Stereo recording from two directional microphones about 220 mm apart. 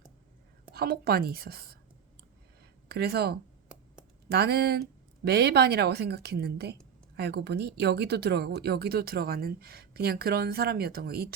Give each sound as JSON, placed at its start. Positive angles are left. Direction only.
{"t": 0.7, "sound": "a woman's voice", "side_deg": -45}
{"t": 2.9, "sound": "a woman's voice", "side_deg": -45}